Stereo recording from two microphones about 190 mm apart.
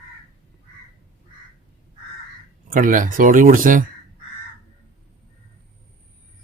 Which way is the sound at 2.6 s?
45° right (ahead or behind).